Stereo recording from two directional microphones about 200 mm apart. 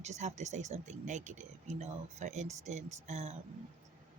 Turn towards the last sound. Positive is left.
turn(degrees=-35)  # may be behind; listen again after turning